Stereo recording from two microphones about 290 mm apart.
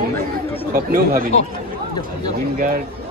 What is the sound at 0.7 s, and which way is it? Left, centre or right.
Speech, right.